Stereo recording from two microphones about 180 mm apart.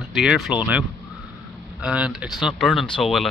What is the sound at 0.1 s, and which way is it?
Speech, centre (ahead or behind).